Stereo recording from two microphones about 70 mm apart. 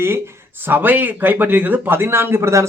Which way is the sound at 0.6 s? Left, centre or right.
Right.